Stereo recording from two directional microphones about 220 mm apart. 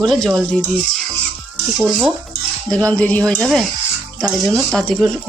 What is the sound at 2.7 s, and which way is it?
Speech, 5° left (ahead or behind).